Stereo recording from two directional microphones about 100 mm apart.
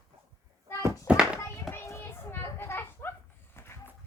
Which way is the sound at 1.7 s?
25° left (ahead or behind).